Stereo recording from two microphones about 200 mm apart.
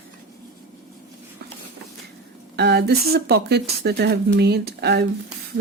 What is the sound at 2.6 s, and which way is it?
Speech, 55° right (ahead or behind).